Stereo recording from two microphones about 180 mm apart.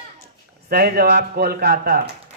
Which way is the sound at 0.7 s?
60° right (ahead or behind).